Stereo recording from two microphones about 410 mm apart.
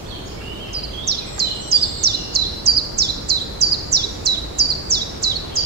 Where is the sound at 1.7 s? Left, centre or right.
Right.